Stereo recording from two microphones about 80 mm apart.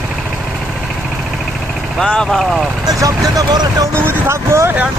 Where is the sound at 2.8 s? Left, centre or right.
Right.